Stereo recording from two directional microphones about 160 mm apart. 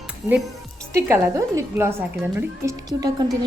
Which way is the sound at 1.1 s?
15° right (ahead or behind).